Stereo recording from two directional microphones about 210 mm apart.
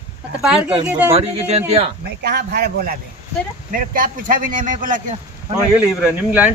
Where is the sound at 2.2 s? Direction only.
50° right (ahead or behind).